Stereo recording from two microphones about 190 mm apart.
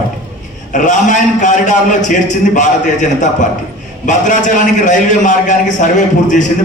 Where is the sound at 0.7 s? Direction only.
40° left (ahead or behind).